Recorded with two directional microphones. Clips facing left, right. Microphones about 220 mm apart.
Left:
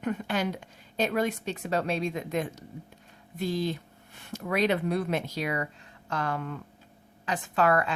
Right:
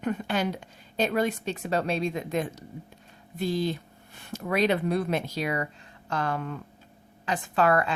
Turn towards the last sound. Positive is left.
turn(degrees=-30)  # may be behind; listen again after turning